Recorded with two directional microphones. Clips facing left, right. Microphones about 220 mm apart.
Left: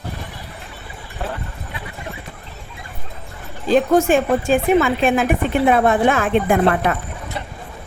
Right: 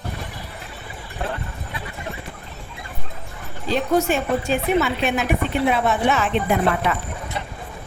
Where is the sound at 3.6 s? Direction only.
50° left (ahead or behind).